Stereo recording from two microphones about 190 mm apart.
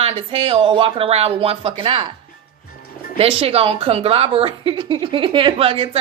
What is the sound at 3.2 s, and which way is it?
A woman's voice, 30° right (ahead or behind).